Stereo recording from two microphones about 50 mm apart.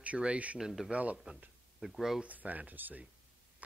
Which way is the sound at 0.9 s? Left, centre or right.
Right.